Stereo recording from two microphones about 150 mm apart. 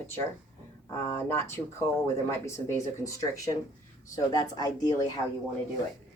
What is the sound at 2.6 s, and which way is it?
Speech, 20° left (ahead or behind).